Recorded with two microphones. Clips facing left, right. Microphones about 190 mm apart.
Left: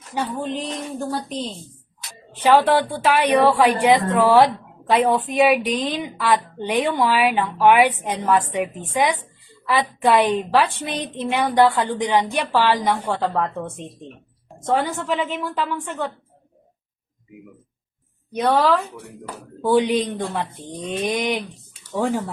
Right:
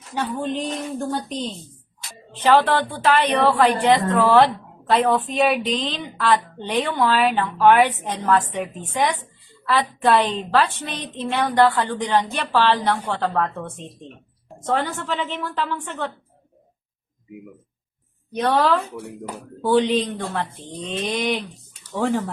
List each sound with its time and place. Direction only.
0.1 s a woman's voice: 10° left (ahead or behind)
18.3 s a woman's voice: 10° left (ahead or behind)